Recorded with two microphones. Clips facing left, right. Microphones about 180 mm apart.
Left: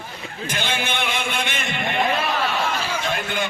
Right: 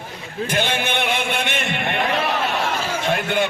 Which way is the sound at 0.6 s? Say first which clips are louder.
Right 3 dB; 60° right (ahead or behind).